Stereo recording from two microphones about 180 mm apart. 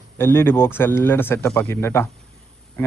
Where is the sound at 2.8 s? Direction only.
10° left (ahead or behind).